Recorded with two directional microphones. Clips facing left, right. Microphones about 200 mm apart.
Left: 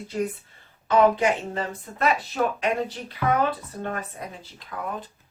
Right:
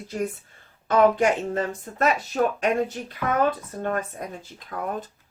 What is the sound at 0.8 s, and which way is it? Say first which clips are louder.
A woman's voice: right 1 dB; 50° right (ahead or behind).